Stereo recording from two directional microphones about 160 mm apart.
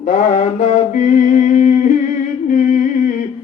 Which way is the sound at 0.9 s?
50° left (ahead or behind).